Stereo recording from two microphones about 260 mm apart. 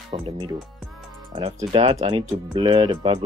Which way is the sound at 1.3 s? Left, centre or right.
Centre.